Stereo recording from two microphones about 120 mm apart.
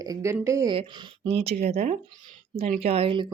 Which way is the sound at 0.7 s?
40° right (ahead or behind).